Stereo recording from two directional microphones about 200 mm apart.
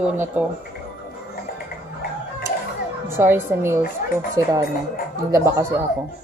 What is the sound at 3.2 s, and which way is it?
Speech, 10° right (ahead or behind).